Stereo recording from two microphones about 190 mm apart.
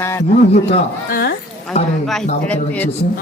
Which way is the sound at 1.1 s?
55° left (ahead or behind).